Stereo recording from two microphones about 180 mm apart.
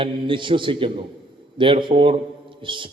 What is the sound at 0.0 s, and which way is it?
A man's voice, 30° right (ahead or behind).